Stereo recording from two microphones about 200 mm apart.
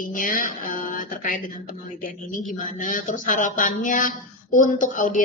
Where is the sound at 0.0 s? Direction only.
40° left (ahead or behind).